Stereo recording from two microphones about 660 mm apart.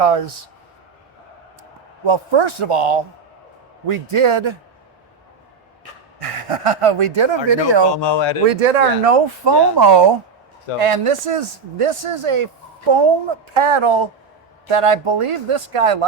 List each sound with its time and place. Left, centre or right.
0.0 s speech: right
2.0 s speech: right
6.2 s speech: right
8.0 s speech: left
8.4 s speech: right
9.4 s speech: right
10.8 s speech: right